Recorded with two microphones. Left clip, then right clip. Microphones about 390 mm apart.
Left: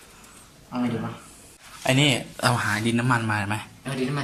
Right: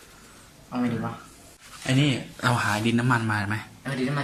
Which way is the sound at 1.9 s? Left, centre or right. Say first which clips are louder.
Left 4 dB; left.